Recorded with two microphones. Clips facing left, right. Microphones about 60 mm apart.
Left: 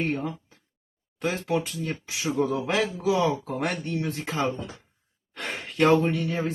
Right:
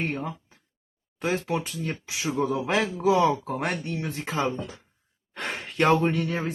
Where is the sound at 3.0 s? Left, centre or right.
Right.